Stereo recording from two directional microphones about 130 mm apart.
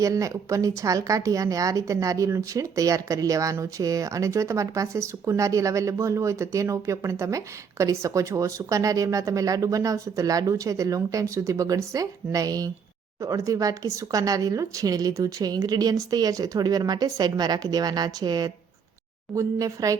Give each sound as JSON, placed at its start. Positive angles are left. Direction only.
{"t": 0.0, "sound": "a woman's voice", "side_deg": -25}